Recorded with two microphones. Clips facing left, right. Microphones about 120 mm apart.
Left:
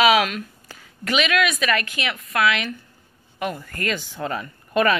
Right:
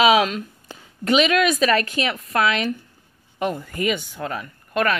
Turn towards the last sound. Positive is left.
turn(degrees=0)  # may be behind; listen again after turning